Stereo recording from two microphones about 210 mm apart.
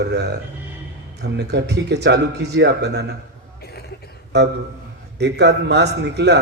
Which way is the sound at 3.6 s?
50° left (ahead or behind).